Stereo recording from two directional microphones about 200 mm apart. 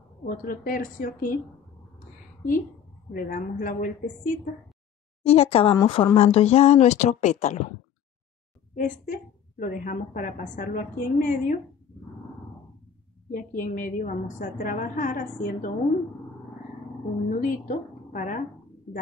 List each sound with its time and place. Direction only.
0.2 s a woman's voice: 45° left (ahead or behind)
3.1 s a woman's voice: 45° left (ahead or behind)
5.2 s a woman's voice: 30° left (ahead or behind)
8.7 s a woman's voice: 40° left (ahead or behind)
13.3 s a woman's voice: 40° left (ahead or behind)
17.3 s speech: 40° left (ahead or behind)